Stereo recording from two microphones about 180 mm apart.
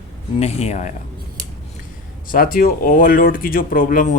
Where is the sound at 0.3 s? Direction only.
35° left (ahead or behind).